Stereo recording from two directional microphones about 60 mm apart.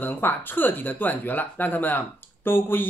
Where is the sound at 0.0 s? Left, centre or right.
Left.